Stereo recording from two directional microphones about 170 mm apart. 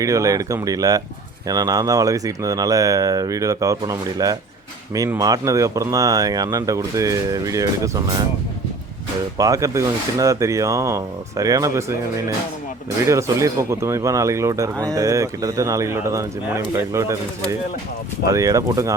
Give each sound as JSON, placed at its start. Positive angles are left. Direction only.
{"t": 0.0, "sound": "speech", "side_deg": -20}
{"t": 9.4, "sound": "speech", "side_deg": -20}
{"t": 13.1, "sound": "speech", "side_deg": -15}
{"t": 18.3, "sound": "speech", "side_deg": -20}